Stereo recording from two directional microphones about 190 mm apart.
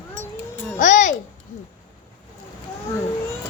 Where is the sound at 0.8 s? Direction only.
40° left (ahead or behind).